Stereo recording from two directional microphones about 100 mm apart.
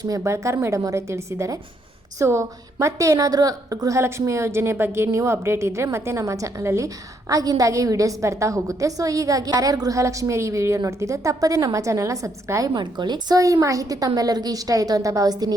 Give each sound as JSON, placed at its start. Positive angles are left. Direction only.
{"t": 0.0, "sound": "a woman's voice", "side_deg": -35}
{"t": 12.7, "sound": "a woman's voice", "side_deg": -50}